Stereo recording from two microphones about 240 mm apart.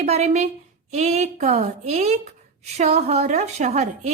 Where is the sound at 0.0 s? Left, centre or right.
Right.